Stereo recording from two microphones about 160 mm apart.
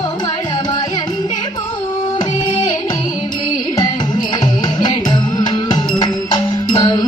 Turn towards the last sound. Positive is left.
turn(degrees=25)  # may be behind; listen again after turning